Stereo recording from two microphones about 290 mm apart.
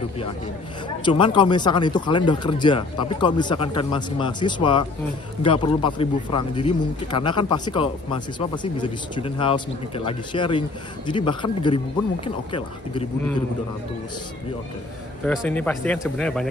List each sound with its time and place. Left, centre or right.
1.0 s speech: centre
15.2 s speech: centre